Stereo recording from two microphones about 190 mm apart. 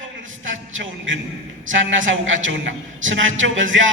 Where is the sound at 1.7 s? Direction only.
90° right.